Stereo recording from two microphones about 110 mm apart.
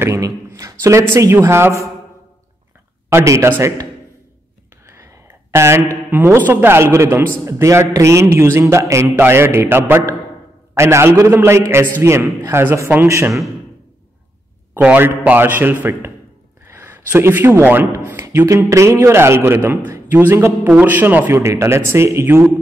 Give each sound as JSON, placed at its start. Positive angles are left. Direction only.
{"t": 0.0, "sound": "a man's voice", "side_deg": -25}
{"t": 0.5, "sound": "a sound", "side_deg": -30}
{"t": 1.1, "sound": "a man's voice", "side_deg": -25}
{"t": 3.1, "sound": "a man's voice", "side_deg": -25}
{"t": 4.8, "sound": "whispering", "side_deg": -25}
{"t": 5.3, "sound": "a sound", "side_deg": -25}
{"t": 6.0, "sound": "a man's voice", "side_deg": -20}
{"t": 14.7, "sound": "a man's voice", "side_deg": -15}